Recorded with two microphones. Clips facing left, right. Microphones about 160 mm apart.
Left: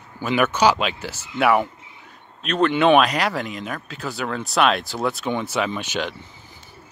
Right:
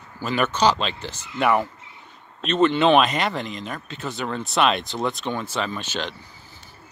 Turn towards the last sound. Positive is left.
turn(degrees=10)  # may be behind; listen again after turning